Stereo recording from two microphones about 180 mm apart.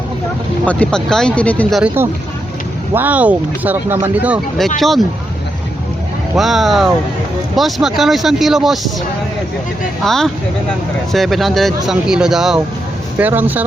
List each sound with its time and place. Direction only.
0.6 s speech: 5° left (ahead or behind)
2.9 s speech: 10° right (ahead or behind)
6.3 s speech: centre (ahead or behind)
10.0 s speech: centre (ahead or behind)